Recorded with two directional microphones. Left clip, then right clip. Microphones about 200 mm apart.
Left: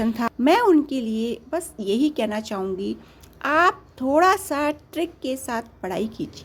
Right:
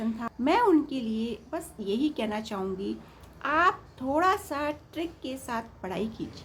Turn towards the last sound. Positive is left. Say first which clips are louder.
# left 6 dB
turn(degrees=40)  # may be behind; listen again after turning